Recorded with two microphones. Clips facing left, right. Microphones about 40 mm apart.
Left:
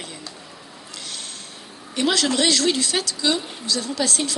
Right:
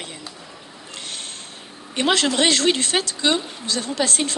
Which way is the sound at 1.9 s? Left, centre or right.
Right.